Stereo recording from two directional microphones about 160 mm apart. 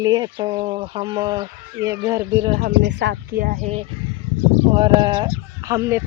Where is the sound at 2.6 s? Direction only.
90° right; by 3.5 s 70° right (ahead or behind).